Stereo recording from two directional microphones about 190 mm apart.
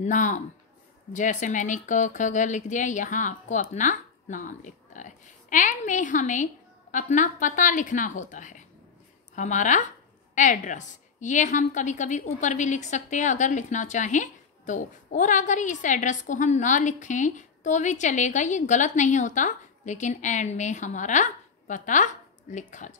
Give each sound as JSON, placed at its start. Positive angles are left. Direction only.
{"t": 0.0, "sound": "a woman's voice", "side_deg": 40}